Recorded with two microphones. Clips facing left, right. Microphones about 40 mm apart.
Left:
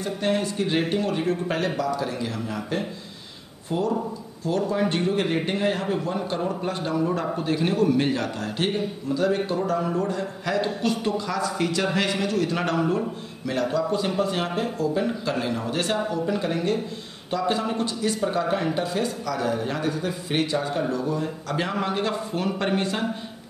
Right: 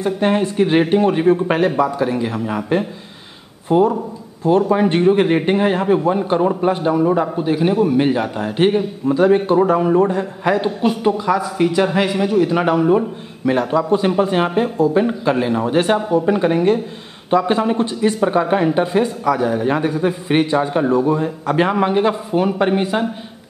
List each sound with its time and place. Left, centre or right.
0.0 s a man's voice: right
13.5 s speech: right